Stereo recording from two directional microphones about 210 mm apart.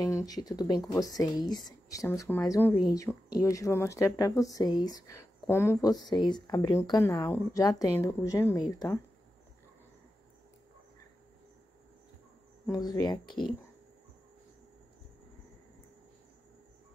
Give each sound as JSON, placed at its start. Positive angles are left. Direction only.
{"t": 0.0, "sound": "speech", "side_deg": 15}
{"t": 12.6, "sound": "speech", "side_deg": 20}